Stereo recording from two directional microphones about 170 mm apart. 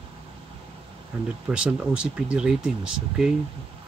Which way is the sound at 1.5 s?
5° right (ahead or behind).